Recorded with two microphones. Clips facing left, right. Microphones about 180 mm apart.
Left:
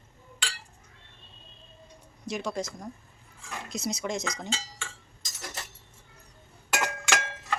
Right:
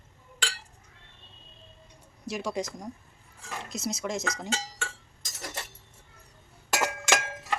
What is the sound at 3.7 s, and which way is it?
Speech, centre (ahead or behind).